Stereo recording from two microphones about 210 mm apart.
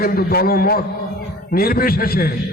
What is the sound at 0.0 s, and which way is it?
A man's voice, 45° left (ahead or behind).